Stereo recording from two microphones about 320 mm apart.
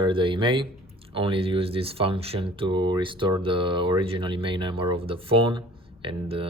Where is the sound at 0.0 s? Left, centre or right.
Centre.